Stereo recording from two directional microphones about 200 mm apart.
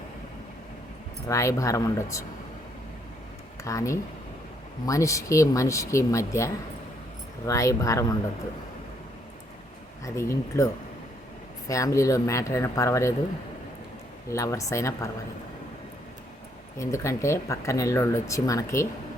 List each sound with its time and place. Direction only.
1.3 s speech: 15° left (ahead or behind)
3.6 s speech: 15° left (ahead or behind)
10.0 s speech: 15° left (ahead or behind)
11.7 s speech: 15° left (ahead or behind)
14.3 s speech: 15° left (ahead or behind)
16.7 s speech: 15° left (ahead or behind)